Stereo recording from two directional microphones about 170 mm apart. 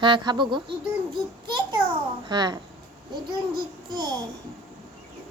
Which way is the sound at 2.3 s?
25° right (ahead or behind).